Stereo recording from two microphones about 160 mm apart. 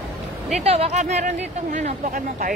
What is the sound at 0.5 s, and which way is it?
Speech, 40° right (ahead or behind).